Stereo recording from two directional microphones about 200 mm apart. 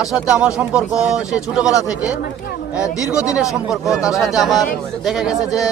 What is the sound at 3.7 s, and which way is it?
Speech, centre (ahead or behind).